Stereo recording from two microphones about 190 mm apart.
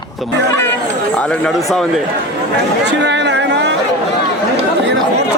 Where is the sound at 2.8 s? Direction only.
65° right (ahead or behind).